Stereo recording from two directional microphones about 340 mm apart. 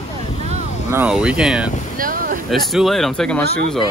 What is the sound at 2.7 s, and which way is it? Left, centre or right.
Speech, centre.